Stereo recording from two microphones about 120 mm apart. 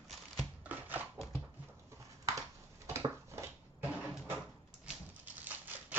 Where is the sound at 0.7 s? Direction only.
15° right (ahead or behind).